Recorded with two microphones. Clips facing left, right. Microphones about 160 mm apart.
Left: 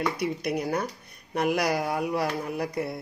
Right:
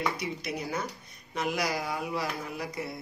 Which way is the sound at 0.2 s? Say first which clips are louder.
Left 7 dB; 60° left (ahead or behind).